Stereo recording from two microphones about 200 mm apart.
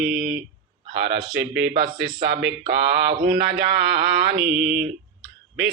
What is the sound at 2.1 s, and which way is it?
Speech, 25° right (ahead or behind).